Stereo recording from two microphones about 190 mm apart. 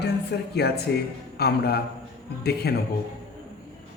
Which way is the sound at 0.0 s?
60° left (ahead or behind).